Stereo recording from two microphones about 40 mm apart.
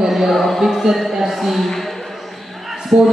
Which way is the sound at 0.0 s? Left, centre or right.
Centre.